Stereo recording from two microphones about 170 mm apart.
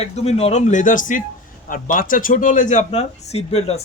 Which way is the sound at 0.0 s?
40° left (ahead or behind).